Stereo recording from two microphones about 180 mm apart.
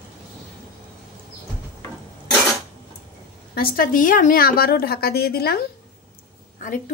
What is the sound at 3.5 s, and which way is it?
A woman's voice, 55° left (ahead or behind).